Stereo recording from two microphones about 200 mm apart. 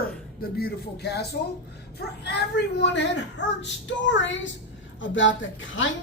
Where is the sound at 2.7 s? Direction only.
60° left (ahead or behind).